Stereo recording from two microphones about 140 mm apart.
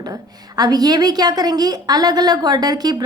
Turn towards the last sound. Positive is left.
turn(degrees=-30)  # may be behind; listen again after turning